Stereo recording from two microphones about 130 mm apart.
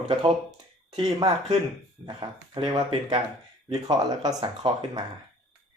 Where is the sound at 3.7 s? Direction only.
30° right (ahead or behind).